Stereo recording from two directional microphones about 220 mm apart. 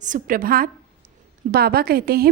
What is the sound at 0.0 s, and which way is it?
A woman's voice, 35° right (ahead or behind).